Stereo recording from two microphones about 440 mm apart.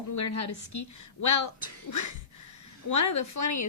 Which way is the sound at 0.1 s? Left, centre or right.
Left.